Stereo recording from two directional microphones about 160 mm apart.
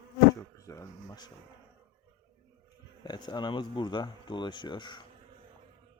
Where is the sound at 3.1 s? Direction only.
25° left (ahead or behind).